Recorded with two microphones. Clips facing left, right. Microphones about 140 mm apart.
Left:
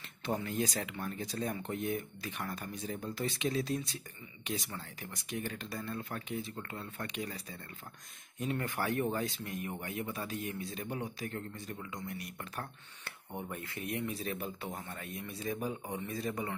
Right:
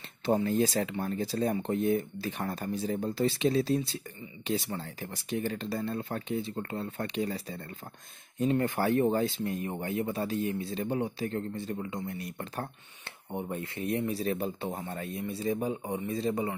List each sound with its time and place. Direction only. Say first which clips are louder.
0.2 s speech: right 8 dB; 30° right (ahead or behind)